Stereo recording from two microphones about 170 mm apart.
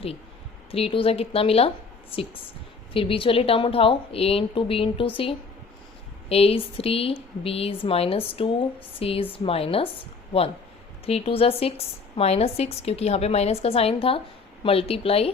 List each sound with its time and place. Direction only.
0.7 s a woman's voice: 35° left (ahead or behind)
11.0 s a woman's voice: 35° left (ahead or behind)